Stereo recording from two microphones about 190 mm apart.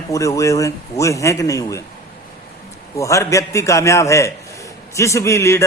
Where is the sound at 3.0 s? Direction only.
15° left (ahead or behind).